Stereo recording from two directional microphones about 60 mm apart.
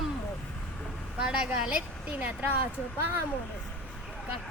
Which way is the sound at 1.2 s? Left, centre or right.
Centre.